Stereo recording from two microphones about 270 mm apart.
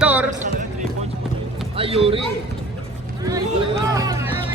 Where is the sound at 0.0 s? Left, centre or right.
Centre.